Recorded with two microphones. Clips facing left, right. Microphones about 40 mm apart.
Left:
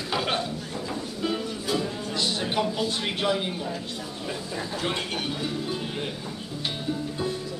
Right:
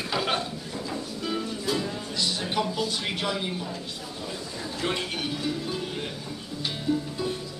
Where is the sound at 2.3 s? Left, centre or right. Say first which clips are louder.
Left 1 dB; centre.